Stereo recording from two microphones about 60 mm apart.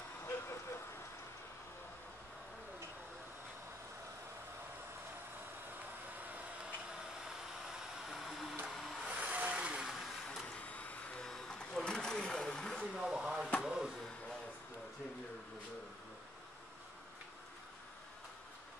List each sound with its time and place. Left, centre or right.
0.2 s vehicle: left
6.2 s vehicle: right
7.0 s vehicle: centre
9.0 s vehicle: centre
9.8 s vehicle: centre
10.4 s a sound: left
11.2 s a sound: centre
12.9 s chop: centre
13.7 s a sound: centre